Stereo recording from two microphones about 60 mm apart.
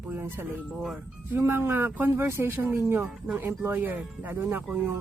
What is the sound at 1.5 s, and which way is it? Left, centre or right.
A woman's voice, right.